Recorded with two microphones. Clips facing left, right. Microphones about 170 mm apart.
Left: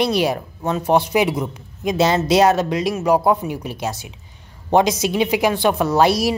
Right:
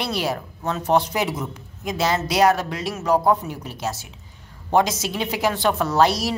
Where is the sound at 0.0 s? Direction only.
15° left (ahead or behind).